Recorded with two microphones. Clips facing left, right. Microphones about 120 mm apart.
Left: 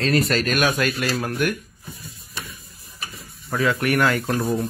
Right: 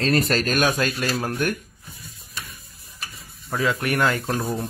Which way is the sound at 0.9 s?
15° right (ahead or behind).